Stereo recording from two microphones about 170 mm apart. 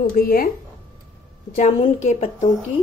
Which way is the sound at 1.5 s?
35° left (ahead or behind).